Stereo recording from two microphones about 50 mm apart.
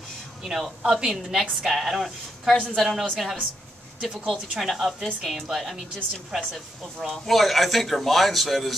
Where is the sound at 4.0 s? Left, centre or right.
Centre.